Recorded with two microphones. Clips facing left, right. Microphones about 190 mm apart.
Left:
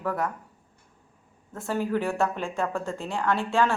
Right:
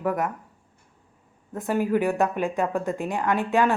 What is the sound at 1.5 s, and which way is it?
Speech, 15° right (ahead or behind).